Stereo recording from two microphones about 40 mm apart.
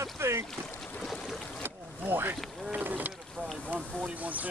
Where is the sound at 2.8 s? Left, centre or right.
Right.